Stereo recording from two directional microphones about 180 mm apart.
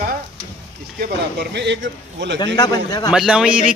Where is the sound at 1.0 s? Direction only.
70° right (ahead or behind).